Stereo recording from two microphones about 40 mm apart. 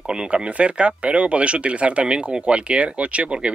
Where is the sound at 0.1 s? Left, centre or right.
Right.